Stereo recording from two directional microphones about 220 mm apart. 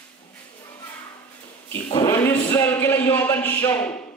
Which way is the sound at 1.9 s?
10° left (ahead or behind).